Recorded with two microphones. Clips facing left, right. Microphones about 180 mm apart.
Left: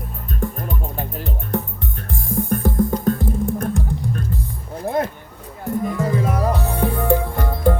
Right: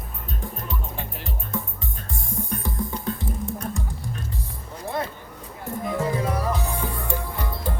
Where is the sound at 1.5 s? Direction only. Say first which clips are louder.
Left 7 dB; 65° left (ahead or behind).